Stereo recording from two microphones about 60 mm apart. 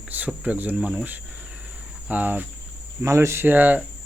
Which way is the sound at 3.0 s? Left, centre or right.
Right.